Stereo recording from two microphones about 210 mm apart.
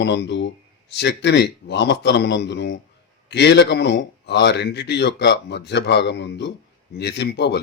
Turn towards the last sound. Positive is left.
turn(degrees=55)  # may be behind; listen again after turning